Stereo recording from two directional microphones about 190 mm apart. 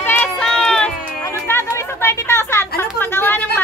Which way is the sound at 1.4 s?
15° left (ahead or behind).